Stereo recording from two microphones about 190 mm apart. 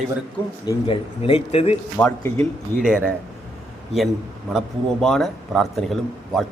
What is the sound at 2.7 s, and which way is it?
Speech, 5° right (ahead or behind).